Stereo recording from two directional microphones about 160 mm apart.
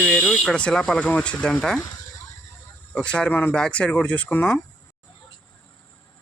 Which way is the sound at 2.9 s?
5° left (ahead or behind).